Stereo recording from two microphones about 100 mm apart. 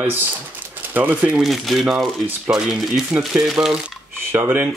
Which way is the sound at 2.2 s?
15° right (ahead or behind).